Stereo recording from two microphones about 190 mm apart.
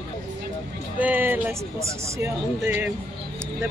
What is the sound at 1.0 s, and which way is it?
Speech, 10° right (ahead or behind).